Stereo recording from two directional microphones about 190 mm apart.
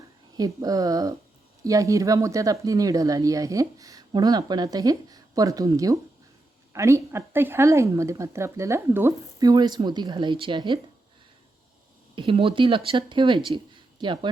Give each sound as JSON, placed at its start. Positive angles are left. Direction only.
{"t": 0.3, "sound": "speech", "side_deg": -20}
{"t": 12.1, "sound": "speech", "side_deg": -25}